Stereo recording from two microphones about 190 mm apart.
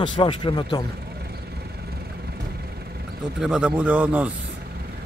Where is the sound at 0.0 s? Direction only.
25° left (ahead or behind).